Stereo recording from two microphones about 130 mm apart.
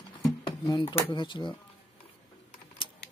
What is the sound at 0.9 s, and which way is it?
Speech, 40° left (ahead or behind).